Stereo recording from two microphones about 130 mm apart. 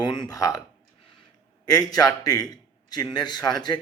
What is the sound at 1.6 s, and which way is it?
A man's voice, 30° left (ahead or behind).